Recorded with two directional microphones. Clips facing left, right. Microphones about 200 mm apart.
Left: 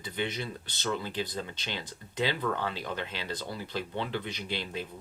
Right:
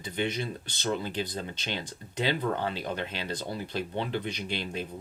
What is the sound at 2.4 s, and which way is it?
Speech, 25° right (ahead or behind).